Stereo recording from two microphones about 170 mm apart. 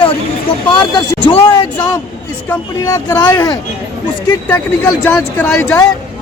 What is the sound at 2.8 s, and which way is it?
Speech, 20° left (ahead or behind).